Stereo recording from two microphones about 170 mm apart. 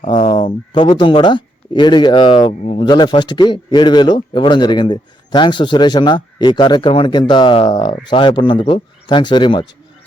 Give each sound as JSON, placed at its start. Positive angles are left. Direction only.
{"t": 0.1, "sound": "a man's voice", "side_deg": 30}